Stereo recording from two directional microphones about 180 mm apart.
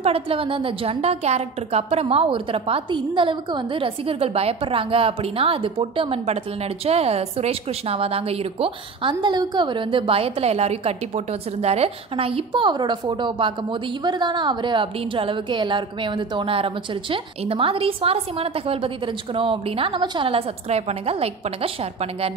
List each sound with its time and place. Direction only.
0.0 s a woman's voice: 30° right (ahead or behind)